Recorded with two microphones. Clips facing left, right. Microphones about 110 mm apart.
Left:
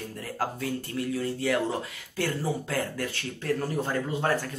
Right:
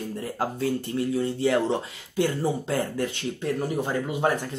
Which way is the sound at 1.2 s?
25° right (ahead or behind).